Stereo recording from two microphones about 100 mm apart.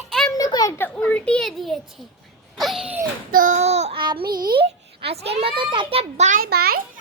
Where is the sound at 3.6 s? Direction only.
90° right.